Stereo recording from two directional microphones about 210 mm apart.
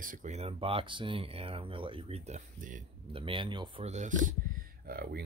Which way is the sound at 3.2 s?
25° right (ahead or behind).